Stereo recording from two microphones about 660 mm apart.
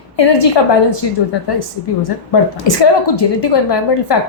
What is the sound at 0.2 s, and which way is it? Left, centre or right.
Speech, left.